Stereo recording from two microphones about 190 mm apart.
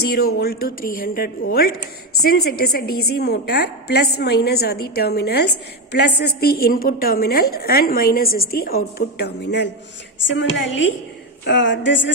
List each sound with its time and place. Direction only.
0.0 s a woman's voice: 55° left (ahead or behind)